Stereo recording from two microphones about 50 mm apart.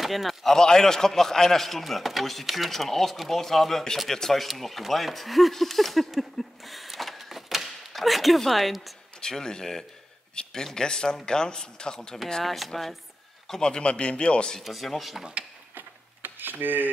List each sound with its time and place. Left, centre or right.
0.0 s a man's voice: centre
9.2 s a man's voice: centre
13.5 s a man's voice: centre
14.6 s a man's voice: centre
15.7 s a sound: right